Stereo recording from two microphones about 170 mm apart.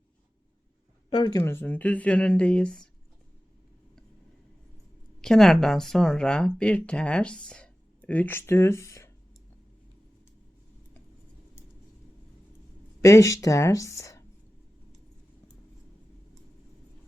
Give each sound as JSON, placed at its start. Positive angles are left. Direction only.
{"t": 1.1, "sound": "speech", "side_deg": 30}
{"t": 1.4, "sound": "speech", "side_deg": 15}
{"t": 5.2, "sound": "speech", "side_deg": 0}
{"t": 13.0, "sound": "speech", "side_deg": 20}